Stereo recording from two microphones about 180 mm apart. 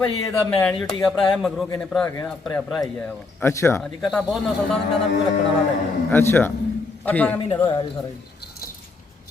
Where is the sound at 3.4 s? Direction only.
15° left (ahead or behind).